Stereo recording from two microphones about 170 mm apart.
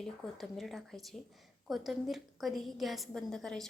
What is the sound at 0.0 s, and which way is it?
A woman's voice, centre (ahead or behind).